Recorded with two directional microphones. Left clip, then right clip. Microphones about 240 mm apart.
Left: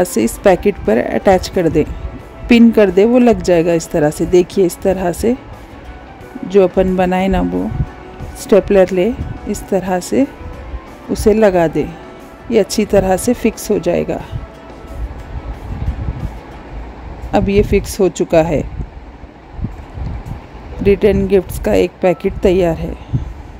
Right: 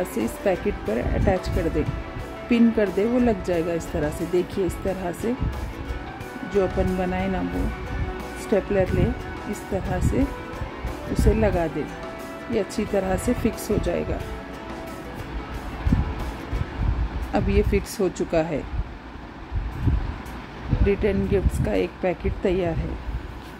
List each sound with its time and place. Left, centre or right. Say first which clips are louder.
0.2 s speech: left 12 dB; left
6.5 s speech: left 12 dB; left
8.5 s speech: left 12 dB; left
11.3 s speech: left 13 dB; left
17.3 s speech: left 10 dB; left
20.8 s speech: left 11 dB; left